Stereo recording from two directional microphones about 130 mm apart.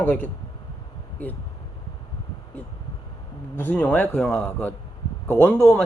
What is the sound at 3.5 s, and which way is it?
Speech, 15° left (ahead or behind).